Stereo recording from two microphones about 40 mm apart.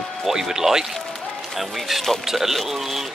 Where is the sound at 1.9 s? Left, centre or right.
Centre.